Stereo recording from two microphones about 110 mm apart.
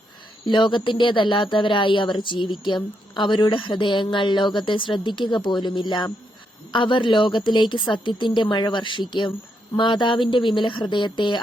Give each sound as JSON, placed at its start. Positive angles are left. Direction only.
{"t": 0.4, "sound": "speech", "side_deg": 45}